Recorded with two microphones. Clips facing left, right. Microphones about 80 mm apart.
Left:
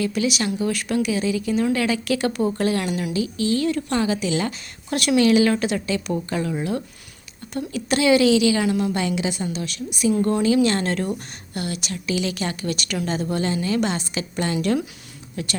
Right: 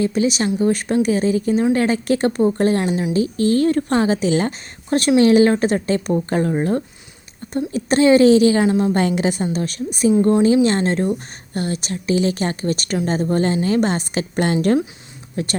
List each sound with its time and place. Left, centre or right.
0.0 s a woman's voice: right
9.0 s a woman's voice: right
10.1 s a woman's voice: right